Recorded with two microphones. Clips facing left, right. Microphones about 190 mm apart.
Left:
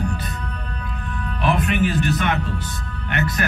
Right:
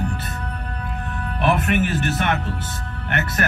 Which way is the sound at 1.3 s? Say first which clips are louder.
Right 1 dB; 50° right (ahead or behind).